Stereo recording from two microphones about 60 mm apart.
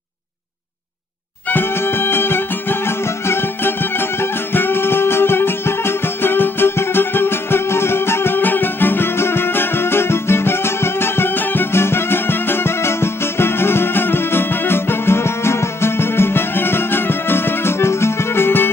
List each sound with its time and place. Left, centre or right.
1.5 s music: left
4.2 s music: left